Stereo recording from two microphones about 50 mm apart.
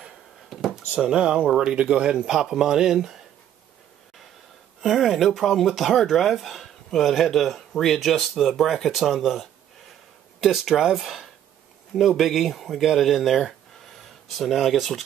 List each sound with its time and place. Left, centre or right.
0.5 s drawer open or close: centre
0.9 s speech: centre
4.8 s speech: centre